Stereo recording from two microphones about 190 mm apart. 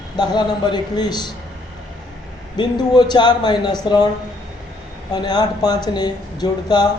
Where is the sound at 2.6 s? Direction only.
25° left (ahead or behind).